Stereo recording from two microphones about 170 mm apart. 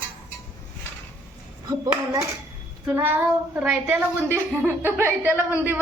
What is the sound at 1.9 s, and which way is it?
A woman's voice, 15° right (ahead or behind).